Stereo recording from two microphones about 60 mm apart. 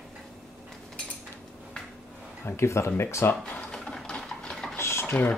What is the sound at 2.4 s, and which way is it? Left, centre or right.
Speech, left.